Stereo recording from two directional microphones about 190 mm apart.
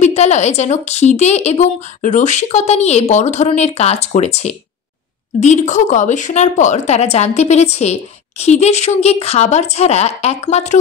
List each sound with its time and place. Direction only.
0.0 s a woman's voice: 35° left (ahead or behind)